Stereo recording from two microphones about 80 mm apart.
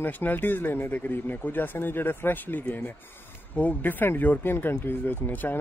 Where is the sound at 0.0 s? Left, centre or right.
Left.